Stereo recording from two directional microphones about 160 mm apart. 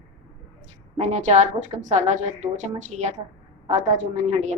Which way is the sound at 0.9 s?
45° right (ahead or behind).